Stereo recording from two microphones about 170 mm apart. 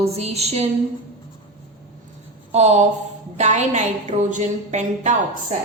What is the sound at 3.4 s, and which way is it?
A woman's voice, 45° right (ahead or behind).